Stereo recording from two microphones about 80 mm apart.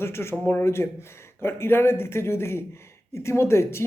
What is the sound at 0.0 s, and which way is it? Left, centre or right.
A man's voice, left.